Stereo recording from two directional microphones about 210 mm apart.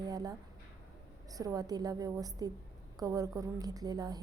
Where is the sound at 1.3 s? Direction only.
15° right (ahead or behind).